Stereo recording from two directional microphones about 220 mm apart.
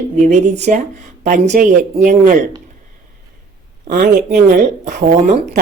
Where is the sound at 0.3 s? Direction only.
30° right (ahead or behind).